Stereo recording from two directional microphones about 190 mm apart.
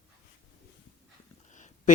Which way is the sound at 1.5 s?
40° left (ahead or behind).